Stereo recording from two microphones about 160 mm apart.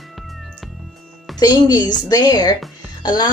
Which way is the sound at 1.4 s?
25° left (ahead or behind).